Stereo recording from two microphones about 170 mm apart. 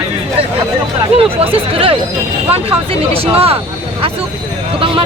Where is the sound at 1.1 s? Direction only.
35° right (ahead or behind).